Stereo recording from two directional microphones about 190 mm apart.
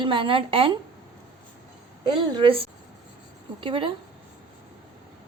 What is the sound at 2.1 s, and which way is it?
Speech, 25° right (ahead or behind).